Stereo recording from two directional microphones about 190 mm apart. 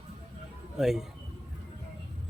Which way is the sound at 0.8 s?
Centre (ahead or behind).